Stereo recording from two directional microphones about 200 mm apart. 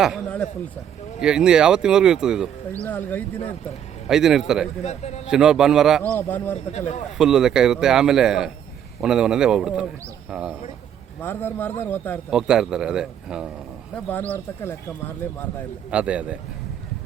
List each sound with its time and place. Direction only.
0.0 s speech: centre (ahead or behind)
2.8 s speech: 10° left (ahead or behind)
4.1 s speech: centre (ahead or behind)
4.8 s a man's voice: 35° left (ahead or behind)
5.3 s speech: 5° right (ahead or behind)
6.0 s speech: 10° left (ahead or behind)
6.7 s a man's voice: 35° left (ahead or behind)
7.2 s speech: centre (ahead or behind)
11.2 s speech: 10° left (ahead or behind)
12.3 s speech: 5° right (ahead or behind)
13.9 s speech: 5° left (ahead or behind)
15.9 s speech: 5° right (ahead or behind)